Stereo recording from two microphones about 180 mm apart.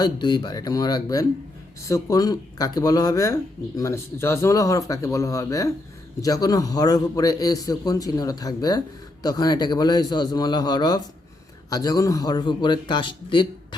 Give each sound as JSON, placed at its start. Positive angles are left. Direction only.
{"t": 0.0, "sound": "a man's voice", "side_deg": 25}